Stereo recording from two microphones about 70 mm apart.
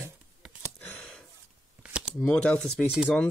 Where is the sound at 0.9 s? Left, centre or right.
Centre.